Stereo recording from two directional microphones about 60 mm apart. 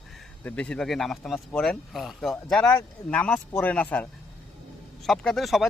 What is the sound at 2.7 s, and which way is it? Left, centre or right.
Speech, left.